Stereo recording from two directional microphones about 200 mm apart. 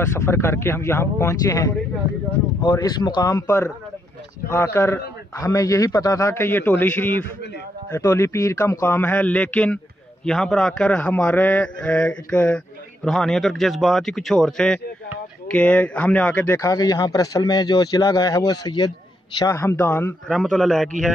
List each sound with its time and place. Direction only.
0.0 s a man's voice: 10° left (ahead or behind)